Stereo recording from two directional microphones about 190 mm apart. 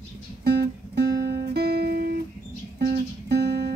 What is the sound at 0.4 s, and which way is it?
Music, 60° right (ahead or behind).